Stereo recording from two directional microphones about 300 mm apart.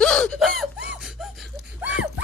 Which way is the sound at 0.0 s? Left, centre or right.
Centre.